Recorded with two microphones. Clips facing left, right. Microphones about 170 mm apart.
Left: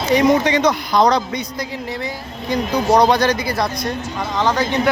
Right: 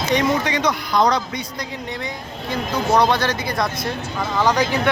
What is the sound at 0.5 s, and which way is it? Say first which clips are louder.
Speech: left 4 dB; 30° left (ahead or behind).